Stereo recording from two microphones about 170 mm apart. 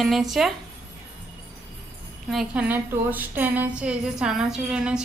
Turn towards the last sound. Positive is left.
turn(degrees=-5)  # may be behind; listen again after turning